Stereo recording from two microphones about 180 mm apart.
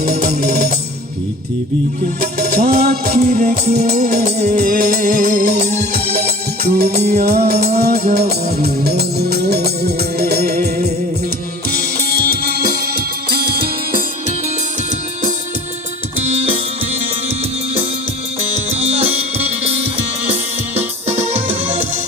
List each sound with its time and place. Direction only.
0.0 s music: 55° right (ahead or behind)
2.4 s music: 55° right (ahead or behind)
6.9 s music: 40° right (ahead or behind)
7.3 s music: 60° right (ahead or behind)
8.8 s organ: 60° right (ahead or behind)
12.4 s music: 55° right (ahead or behind)
18.7 s music: 35° right (ahead or behind)
21.2 s music: 35° right (ahead or behind)